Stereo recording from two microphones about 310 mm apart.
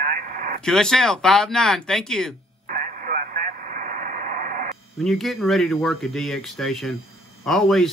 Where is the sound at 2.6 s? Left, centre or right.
Right.